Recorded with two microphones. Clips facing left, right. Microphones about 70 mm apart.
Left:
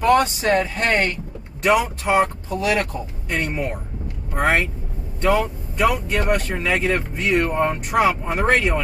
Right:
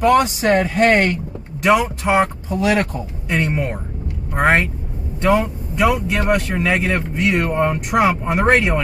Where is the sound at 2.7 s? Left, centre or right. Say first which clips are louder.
Right 3 dB; right.